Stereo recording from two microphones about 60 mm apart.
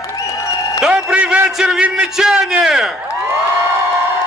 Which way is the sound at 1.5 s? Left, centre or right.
Centre.